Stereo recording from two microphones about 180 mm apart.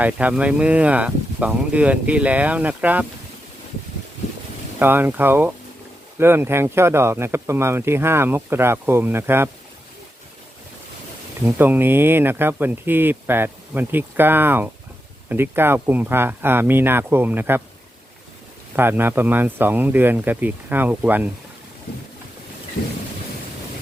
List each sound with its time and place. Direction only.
0.0 s speech: 10° right (ahead or behind)
4.8 s speech: 10° right (ahead or behind)
11.4 s speech: 10° right (ahead or behind)
18.8 s speech: 10° right (ahead or behind)
22.8 s a sound: 60° left (ahead or behind)